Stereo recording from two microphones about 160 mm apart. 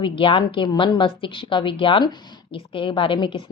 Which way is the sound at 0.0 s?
30° left (ahead or behind).